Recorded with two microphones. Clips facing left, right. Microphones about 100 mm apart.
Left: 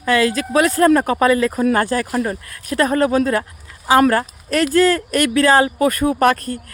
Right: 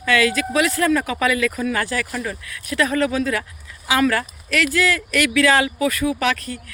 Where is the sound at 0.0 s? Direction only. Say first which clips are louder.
Left 2 dB; 35° left (ahead or behind).